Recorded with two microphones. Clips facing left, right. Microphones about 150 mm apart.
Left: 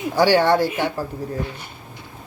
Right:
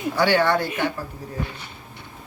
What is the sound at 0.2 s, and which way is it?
Speech, 25° left (ahead or behind).